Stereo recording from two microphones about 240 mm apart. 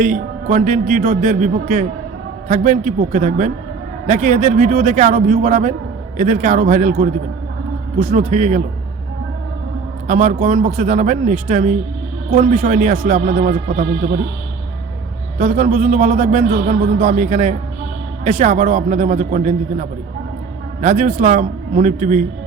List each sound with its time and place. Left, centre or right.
0.0 s a man's voice: right
10.1 s a man's voice: right
15.4 s a man's voice: right